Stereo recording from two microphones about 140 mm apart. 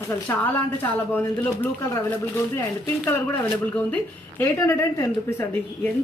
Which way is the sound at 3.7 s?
10° left (ahead or behind).